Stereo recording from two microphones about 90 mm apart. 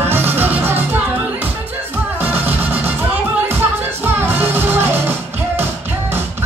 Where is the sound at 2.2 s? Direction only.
20° right (ahead or behind).